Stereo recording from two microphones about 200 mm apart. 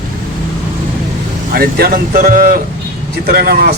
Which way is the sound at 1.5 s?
45° right (ahead or behind).